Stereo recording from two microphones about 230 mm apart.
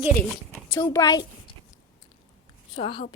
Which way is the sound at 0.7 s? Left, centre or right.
Centre.